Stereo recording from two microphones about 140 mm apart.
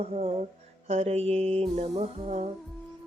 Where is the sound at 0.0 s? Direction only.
45° right (ahead or behind).